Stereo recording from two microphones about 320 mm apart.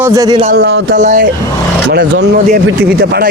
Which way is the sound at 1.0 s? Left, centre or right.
Right.